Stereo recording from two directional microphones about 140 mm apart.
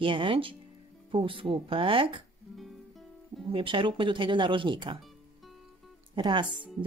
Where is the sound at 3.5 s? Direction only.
40° right (ahead or behind).